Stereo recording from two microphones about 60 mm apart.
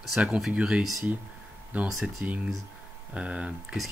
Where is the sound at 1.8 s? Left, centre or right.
Centre.